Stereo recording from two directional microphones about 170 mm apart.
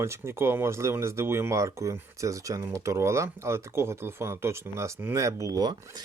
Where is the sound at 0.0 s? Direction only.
15° right (ahead or behind).